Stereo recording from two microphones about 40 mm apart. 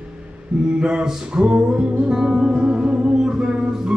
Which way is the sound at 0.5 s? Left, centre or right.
Right.